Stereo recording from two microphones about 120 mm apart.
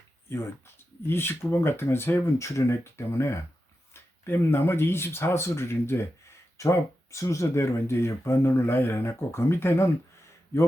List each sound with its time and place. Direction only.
1.0 s speech: 20° left (ahead or behind)